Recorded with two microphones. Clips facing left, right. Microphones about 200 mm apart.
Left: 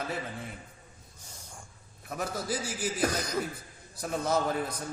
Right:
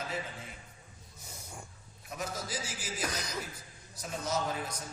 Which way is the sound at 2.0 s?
60° left (ahead or behind).